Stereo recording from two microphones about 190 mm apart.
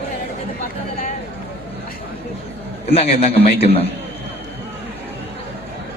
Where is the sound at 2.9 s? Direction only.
30° left (ahead or behind).